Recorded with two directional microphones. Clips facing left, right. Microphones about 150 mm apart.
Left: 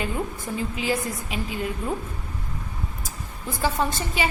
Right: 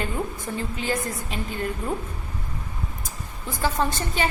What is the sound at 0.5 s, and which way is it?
A woman's voice, 5° left (ahead or behind).